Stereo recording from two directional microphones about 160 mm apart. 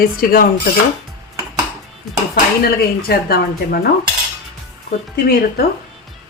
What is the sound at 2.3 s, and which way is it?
Speech, 75° left (ahead or behind).